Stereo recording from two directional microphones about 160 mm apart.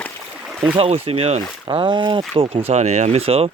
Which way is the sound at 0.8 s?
40° right (ahead or behind).